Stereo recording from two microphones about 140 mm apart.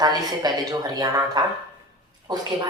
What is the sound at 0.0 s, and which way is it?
Speech, 30° right (ahead or behind).